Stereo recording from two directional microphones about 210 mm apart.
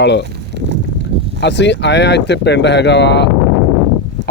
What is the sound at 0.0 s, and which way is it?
Speech, 55° left (ahead or behind).